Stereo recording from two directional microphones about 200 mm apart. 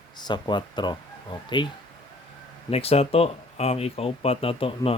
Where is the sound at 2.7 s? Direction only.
30° left (ahead or behind).